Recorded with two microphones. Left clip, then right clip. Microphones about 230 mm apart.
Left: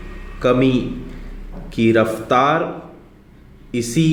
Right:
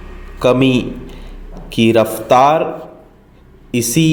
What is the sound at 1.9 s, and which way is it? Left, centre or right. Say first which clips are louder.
Speech: right 4 dB; right.